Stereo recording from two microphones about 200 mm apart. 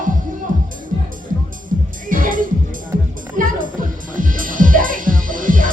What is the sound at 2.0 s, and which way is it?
Music, 45° right (ahead or behind).